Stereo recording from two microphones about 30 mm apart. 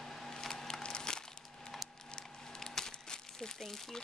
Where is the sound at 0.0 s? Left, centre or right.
Centre.